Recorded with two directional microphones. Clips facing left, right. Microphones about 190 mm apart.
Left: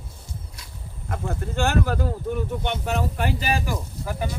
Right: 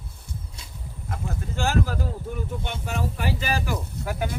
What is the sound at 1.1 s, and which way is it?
Speech, 60° left (ahead or behind).